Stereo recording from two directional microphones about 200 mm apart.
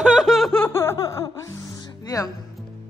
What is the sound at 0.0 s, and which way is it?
Music, centre (ahead or behind).